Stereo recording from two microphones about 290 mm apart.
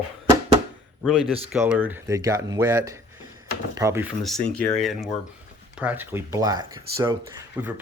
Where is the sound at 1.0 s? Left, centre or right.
Centre.